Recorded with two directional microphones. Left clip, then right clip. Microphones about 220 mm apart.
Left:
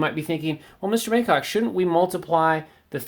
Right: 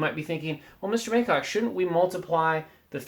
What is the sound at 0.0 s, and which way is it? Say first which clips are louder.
Speech: left 4 dB; 45° left (ahead or behind).